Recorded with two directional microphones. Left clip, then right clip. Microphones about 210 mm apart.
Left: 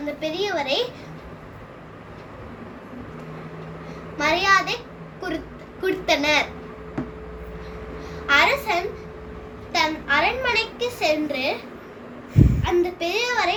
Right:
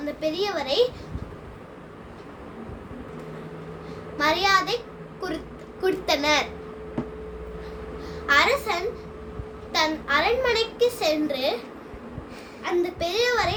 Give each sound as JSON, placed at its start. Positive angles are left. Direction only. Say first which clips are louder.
{"t": 0.2, "sound": "a child's voice", "louder": "left 1 dB", "side_deg": -15}
{"t": 4.2, "sound": "a child's voice", "louder": "left 2 dB", "side_deg": -15}
{"t": 5.8, "sound": "a child's voice", "louder": "left 2 dB", "side_deg": -15}
{"t": 8.3, "sound": "a child's voice", "louder": "left 2 dB", "side_deg": -15}
{"t": 12.6, "sound": "a child's voice", "louder": "even", "side_deg": -20}